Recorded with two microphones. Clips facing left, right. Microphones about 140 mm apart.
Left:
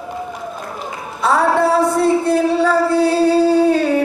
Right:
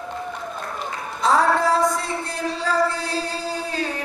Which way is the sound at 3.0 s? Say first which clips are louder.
Left 14 dB; 65° left (ahead or behind).